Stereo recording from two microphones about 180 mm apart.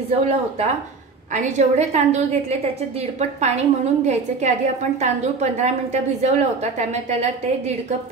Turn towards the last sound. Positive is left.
turn(degrees=-40)  # may be behind; listen again after turning